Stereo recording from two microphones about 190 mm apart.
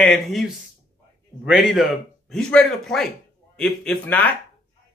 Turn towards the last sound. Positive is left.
turn(degrees=10)  # may be behind; listen again after turning